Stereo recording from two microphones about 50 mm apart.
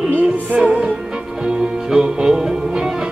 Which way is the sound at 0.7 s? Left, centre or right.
Right.